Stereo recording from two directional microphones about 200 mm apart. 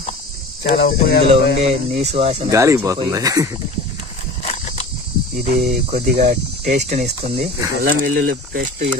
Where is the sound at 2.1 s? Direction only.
30° right (ahead or behind).